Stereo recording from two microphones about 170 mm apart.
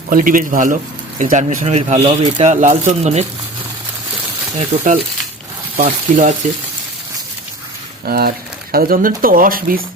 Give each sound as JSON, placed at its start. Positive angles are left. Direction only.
{"t": 0.1, "sound": "speech", "side_deg": -55}
{"t": 4.5, "sound": "speech", "side_deg": -50}
{"t": 8.0, "sound": "speech", "side_deg": -65}